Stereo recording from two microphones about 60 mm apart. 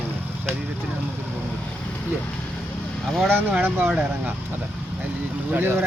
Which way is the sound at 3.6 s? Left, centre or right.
Right.